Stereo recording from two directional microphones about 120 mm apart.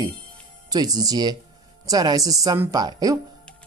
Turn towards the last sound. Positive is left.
turn(degrees=-35)  # may be behind; listen again after turning